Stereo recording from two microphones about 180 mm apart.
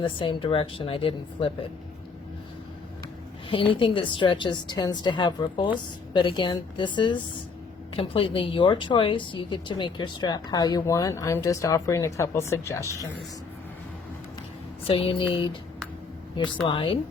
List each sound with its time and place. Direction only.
0.0 s speech: 30° left (ahead or behind)
3.5 s speech: 30° left (ahead or behind)
14.8 s speech: 30° left (ahead or behind)
16.6 s speech: 30° left (ahead or behind)